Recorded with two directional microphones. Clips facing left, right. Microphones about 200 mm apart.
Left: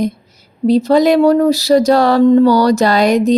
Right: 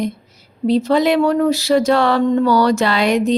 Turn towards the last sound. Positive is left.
turn(degrees=40)  # may be behind; listen again after turning